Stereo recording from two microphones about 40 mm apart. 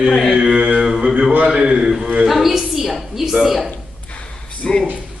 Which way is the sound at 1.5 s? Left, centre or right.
Right.